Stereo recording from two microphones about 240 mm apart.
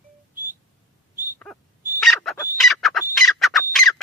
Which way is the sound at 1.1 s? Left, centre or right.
Right.